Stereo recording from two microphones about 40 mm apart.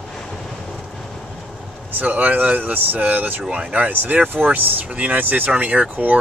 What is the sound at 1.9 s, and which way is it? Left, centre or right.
Speech, right.